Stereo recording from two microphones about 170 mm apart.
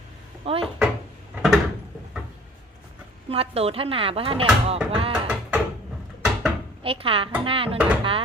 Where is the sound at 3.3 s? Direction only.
35° right (ahead or behind).